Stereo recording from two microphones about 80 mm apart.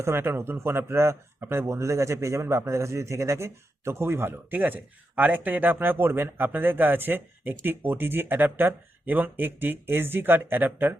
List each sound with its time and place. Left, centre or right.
0.0 s speech: right